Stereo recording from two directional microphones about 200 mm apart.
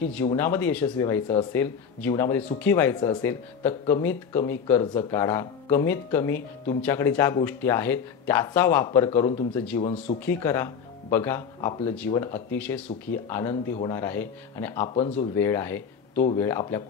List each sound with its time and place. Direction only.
0.0 s speech: 10° left (ahead or behind)
15.0 s speech: 30° left (ahead or behind)
15.3 s speech: 10° left (ahead or behind)